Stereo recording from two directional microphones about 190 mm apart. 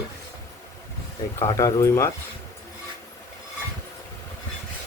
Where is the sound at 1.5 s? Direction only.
15° left (ahead or behind).